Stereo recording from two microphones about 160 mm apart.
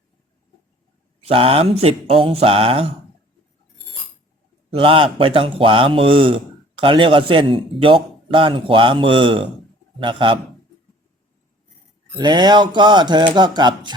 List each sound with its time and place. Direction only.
1.2 s speech: 35° right (ahead or behind)
4.7 s speech: 35° right (ahead or behind)
12.1 s speech: 25° right (ahead or behind)